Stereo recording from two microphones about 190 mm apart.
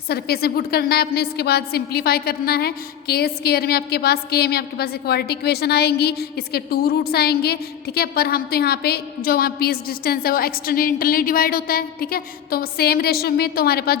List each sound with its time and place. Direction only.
0.1 s a woman's voice: 55° left (ahead or behind)